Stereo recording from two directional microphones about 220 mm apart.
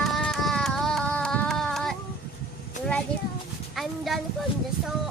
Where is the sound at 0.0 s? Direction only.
Centre (ahead or behind).